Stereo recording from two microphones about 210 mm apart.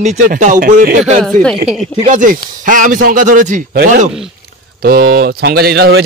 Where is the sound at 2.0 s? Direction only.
40° right (ahead or behind).